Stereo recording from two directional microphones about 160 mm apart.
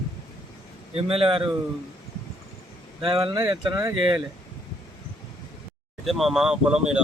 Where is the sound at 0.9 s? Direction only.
35° right (ahead or behind).